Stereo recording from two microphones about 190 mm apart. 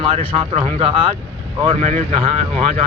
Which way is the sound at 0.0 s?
30° right (ahead or behind).